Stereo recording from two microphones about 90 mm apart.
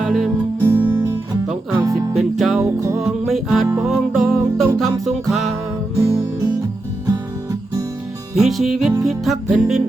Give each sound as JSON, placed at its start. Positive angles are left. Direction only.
{"t": 0.0, "sound": "music", "side_deg": -5}
{"t": 0.8, "sound": "guitar", "side_deg": -25}
{"t": 1.7, "sound": "music", "side_deg": -35}
{"t": 2.1, "sound": "music", "side_deg": 0}
{"t": 2.6, "sound": "music", "side_deg": -35}
{"t": 3.0, "sound": "music", "side_deg": -5}
{"t": 6.0, "sound": "music", "side_deg": -35}
{"t": 8.4, "sound": "music", "side_deg": 0}